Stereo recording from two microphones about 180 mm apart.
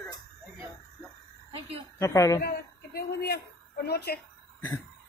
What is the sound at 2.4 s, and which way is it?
A woman's voice, 60° left (ahead or behind).